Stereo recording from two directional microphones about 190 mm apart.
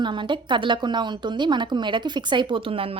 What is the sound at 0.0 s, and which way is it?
A woman's voice, 25° right (ahead or behind).